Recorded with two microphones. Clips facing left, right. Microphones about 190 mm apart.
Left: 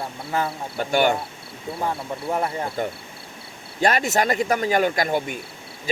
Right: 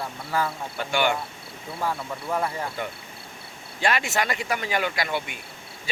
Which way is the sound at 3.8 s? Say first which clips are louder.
Left 5 dB; 40° left (ahead or behind).